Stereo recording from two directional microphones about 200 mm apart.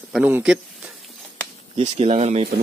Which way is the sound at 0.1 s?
5° right (ahead or behind).